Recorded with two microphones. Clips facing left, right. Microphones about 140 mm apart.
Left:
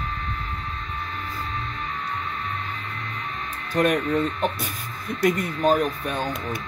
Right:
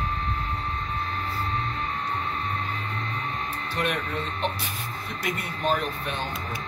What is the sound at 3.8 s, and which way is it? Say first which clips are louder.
Speech: left 8 dB; 40° left (ahead or behind).